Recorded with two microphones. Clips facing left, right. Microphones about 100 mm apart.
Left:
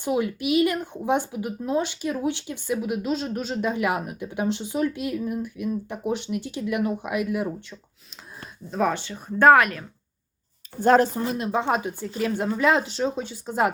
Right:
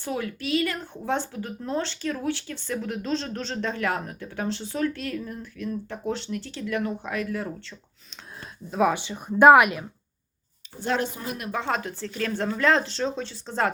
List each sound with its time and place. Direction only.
0.0 s speech: 20° left (ahead or behind)
8.7 s speech: 5° right (ahead or behind)
9.0 s speech: 15° right (ahead or behind)
10.8 s speech: 45° left (ahead or behind)
11.2 s speech: 25° left (ahead or behind)